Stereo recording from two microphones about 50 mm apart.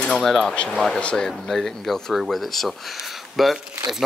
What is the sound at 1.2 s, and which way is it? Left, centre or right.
Speech, centre.